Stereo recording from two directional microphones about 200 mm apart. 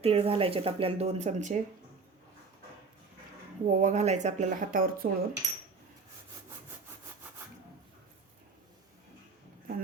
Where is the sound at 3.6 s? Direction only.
40° right (ahead or behind).